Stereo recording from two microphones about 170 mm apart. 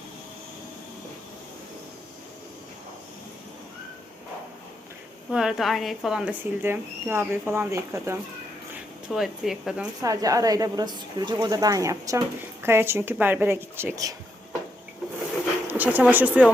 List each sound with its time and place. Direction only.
5.3 s speech: 5° right (ahead or behind)
9.0 s speech: 5° right (ahead or behind)
10.0 s speech: 20° right (ahead or behind)
15.6 s speech: 10° right (ahead or behind)